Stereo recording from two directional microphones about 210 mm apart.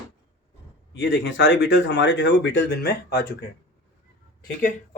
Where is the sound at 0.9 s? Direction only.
60° left (ahead or behind).